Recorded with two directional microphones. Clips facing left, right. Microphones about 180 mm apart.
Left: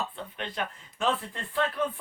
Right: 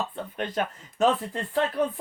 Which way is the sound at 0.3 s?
45° right (ahead or behind).